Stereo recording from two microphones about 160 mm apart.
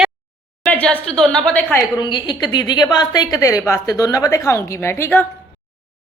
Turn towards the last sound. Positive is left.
turn(degrees=15)  # may be behind; listen again after turning